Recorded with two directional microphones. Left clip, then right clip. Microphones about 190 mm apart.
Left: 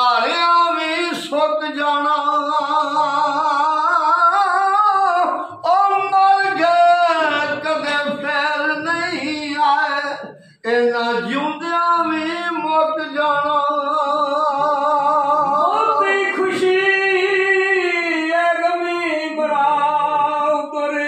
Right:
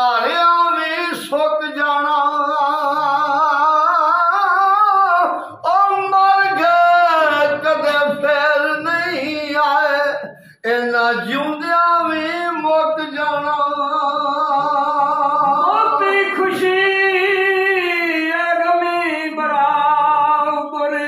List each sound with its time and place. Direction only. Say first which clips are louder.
0.0 s a sound: right 1 dB; 20° left (ahead or behind)
3.1 s humming: right 2 dB; 10° left (ahead or behind)
5.7 s singing: right 1 dB; 10° right (ahead or behind)